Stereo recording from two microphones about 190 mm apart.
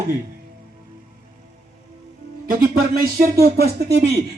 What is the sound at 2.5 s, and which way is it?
Speech, 50° right (ahead or behind).